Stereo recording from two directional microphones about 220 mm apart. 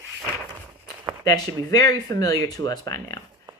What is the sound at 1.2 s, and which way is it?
Speech, 15° left (ahead or behind).